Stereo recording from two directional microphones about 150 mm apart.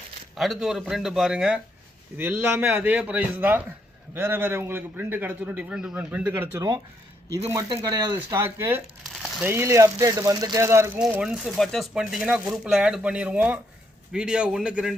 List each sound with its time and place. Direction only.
0.3 s a man's voice: centre (ahead or behind); by 11.0 s 15° right (ahead or behind)
11.1 s speech: 5° right (ahead or behind)